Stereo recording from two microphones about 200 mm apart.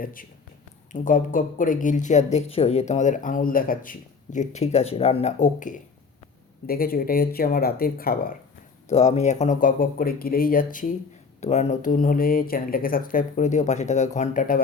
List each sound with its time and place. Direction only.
0.0 s speech: 45° left (ahead or behind)
8.9 s speech: 30° left (ahead or behind)